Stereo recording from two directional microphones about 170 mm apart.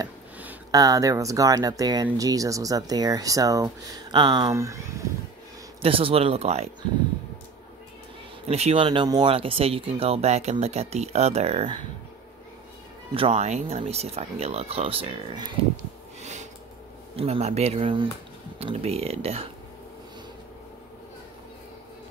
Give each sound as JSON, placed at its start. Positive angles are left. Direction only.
{"t": 0.7, "sound": "speech", "side_deg": -20}
{"t": 5.8, "sound": "speech", "side_deg": -35}
{"t": 8.5, "sound": "speech", "side_deg": -40}
{"t": 13.1, "sound": "speech", "side_deg": -35}
{"t": 15.7, "sound": "snort", "side_deg": -45}
{"t": 17.1, "sound": "speech", "side_deg": -35}